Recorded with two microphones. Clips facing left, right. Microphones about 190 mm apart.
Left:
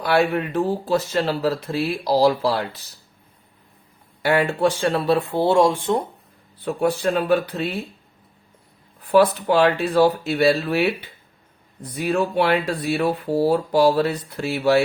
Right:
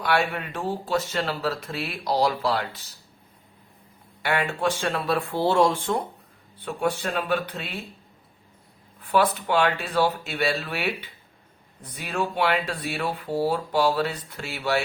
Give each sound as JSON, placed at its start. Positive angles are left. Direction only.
{"t": 0.0, "sound": "speech", "side_deg": 35}
{"t": 4.2, "sound": "speech", "side_deg": 35}
{"t": 6.7, "sound": "speech", "side_deg": 40}
{"t": 9.1, "sound": "speech", "side_deg": 35}